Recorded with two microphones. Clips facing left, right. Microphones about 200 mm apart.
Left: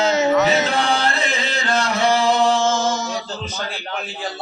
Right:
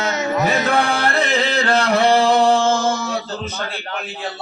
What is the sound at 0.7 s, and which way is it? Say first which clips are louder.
Music: right 2 dB; 55° right (ahead or behind).